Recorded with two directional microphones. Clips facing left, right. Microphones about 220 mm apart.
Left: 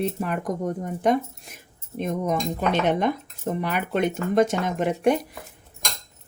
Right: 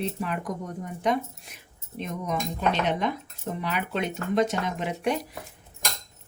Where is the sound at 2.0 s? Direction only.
50° left (ahead or behind).